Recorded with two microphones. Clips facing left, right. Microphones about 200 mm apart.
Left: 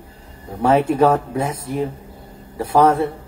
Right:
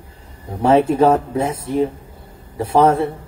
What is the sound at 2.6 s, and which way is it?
Speech, 25° right (ahead or behind).